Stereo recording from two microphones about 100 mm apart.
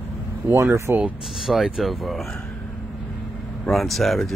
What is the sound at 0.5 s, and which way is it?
Speech, 25° right (ahead or behind).